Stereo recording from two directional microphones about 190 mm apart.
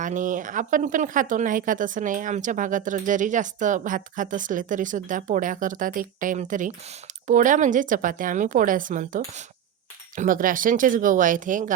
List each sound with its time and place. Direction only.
0.0 s speech: 45° right (ahead or behind)